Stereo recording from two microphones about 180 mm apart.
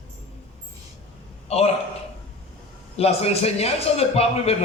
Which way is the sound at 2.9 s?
35° left (ahead or behind).